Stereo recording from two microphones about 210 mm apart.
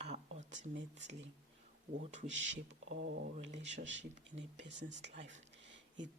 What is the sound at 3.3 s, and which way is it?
Speech, 35° right (ahead or behind).